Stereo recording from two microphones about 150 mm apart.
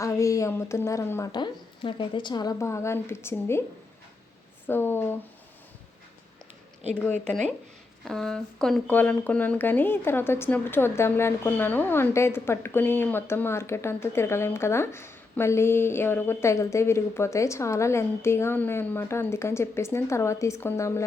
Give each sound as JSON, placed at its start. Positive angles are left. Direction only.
{"t": 0.0, "sound": "a woman's voice", "side_deg": 20}
{"t": 1.3, "sound": "a woman's voice", "side_deg": 30}
{"t": 4.6, "sound": "speech", "side_deg": 15}
{"t": 6.9, "sound": "speech", "side_deg": 5}